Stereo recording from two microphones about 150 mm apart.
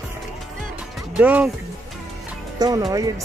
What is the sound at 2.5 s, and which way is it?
Speech, 25° right (ahead or behind).